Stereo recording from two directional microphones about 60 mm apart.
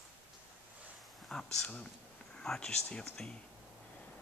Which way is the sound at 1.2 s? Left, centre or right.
Centre.